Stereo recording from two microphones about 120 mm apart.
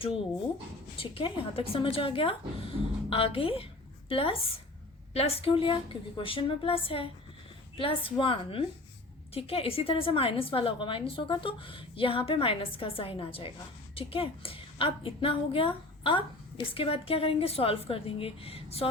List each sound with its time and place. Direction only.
0.9 s a woman's voice: 50° left (ahead or behind)